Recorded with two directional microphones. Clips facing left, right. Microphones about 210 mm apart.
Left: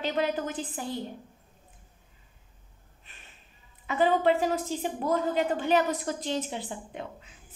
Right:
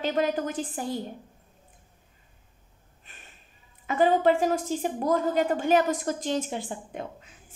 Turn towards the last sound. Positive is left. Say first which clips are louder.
# right 3 dB
turn(degrees=-45)  # may be behind; listen again after turning